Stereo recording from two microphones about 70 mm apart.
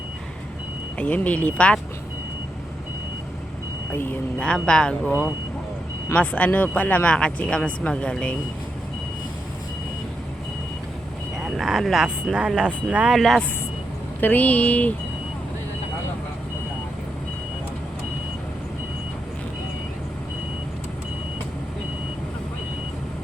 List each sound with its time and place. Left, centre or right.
0.9 s speech: left
4.4 s speech: centre
6.1 s speech: centre
11.3 s speech: centre
13.1 s speech: centre
14.2 s speech: left